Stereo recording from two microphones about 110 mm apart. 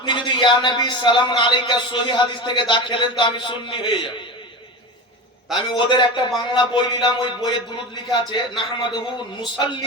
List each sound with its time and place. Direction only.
0.0 s a man's voice: 45° left (ahead or behind)
5.7 s a man's voice: 45° left (ahead or behind)